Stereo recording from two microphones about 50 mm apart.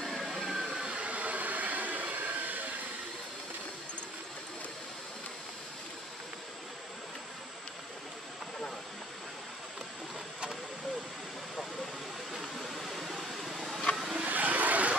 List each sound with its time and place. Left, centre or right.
0.0 s vehicle: centre
0.7 s train: centre; by 2.7 s right
12.4 s vehicle: centre
14.2 s vehicle: right